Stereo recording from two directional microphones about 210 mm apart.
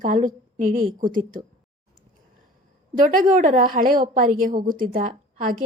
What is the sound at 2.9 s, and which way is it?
Speech, 40° right (ahead or behind).